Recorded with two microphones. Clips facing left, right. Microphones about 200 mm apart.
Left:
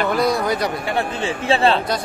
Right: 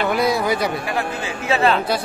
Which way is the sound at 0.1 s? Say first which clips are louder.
Even; 5° right (ahead or behind).